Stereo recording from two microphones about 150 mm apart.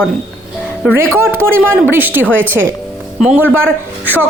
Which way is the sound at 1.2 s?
15° right (ahead or behind).